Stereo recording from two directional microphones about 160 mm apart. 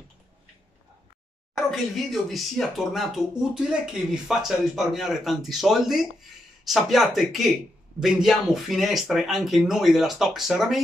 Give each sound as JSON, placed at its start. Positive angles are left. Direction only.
{"t": 1.7, "sound": "speech", "side_deg": 0}